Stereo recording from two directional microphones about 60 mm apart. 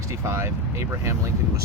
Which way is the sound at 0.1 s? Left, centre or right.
Right.